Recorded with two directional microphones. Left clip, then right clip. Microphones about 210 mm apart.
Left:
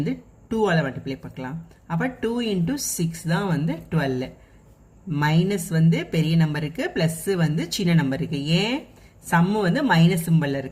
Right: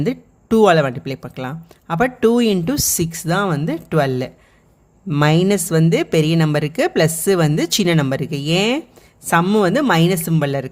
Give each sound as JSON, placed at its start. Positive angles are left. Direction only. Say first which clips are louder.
{"t": 0.0, "sound": "speech", "louder": "right 7 dB", "side_deg": -50}